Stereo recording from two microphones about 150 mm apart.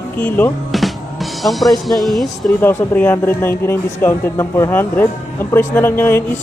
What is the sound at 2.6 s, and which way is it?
A man's voice, 15° left (ahead or behind).